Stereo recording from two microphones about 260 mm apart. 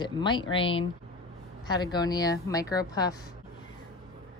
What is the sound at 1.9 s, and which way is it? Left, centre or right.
Speech, centre.